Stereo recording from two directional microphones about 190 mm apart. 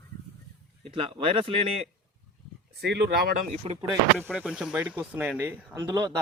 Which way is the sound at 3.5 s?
30° right (ahead or behind).